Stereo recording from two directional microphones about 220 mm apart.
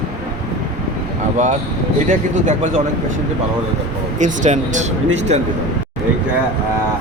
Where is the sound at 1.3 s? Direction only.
35° right (ahead or behind).